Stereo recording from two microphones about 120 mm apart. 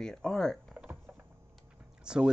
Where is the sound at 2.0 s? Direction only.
5° right (ahead or behind).